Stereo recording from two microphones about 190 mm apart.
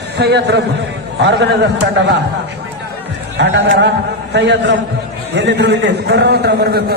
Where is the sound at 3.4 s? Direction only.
70° right (ahead or behind).